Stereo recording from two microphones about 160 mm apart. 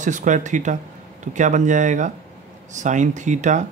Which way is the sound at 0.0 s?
50° right (ahead or behind).